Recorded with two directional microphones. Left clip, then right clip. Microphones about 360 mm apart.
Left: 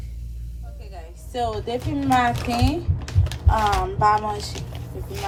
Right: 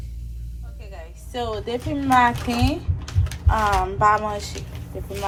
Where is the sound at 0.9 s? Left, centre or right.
Centre.